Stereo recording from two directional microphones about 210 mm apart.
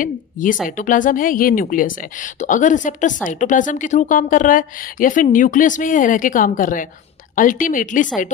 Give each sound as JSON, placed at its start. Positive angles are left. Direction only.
{"t": 0.0, "sound": "a woman's voice", "side_deg": 40}